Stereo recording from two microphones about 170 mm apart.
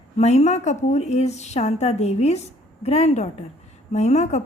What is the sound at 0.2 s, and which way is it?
A woman's voice, 40° left (ahead or behind).